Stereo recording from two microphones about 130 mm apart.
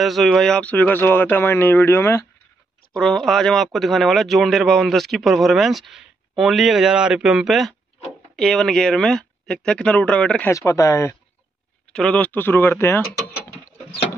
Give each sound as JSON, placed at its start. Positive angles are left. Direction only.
{"t": 0.0, "sound": "speech", "side_deg": 0}
{"t": 2.9, "sound": "speech", "side_deg": 5}
{"t": 10.5, "sound": "speech", "side_deg": 25}
{"t": 11.9, "sound": "speech", "side_deg": 10}